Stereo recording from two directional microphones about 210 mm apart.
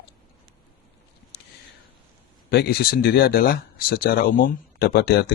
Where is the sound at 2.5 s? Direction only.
45° left (ahead or behind).